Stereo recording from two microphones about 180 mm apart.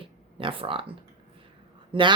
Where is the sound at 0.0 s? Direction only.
30° right (ahead or behind).